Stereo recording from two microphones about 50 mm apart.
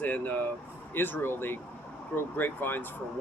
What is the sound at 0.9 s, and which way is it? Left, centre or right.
Speech, left.